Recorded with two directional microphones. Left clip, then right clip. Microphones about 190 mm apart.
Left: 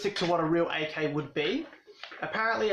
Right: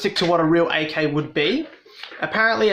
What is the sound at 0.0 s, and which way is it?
Speech, 45° right (ahead or behind).